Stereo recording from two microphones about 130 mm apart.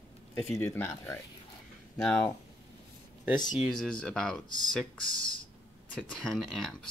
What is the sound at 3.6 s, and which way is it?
Speech, 5° left (ahead or behind).